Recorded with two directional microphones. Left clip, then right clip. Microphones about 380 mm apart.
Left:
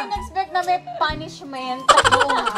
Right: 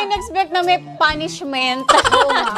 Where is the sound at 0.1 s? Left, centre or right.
Right.